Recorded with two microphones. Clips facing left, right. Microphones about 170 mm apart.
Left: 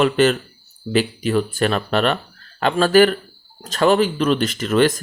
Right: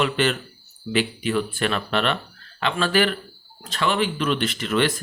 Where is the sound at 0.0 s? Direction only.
40° left (ahead or behind).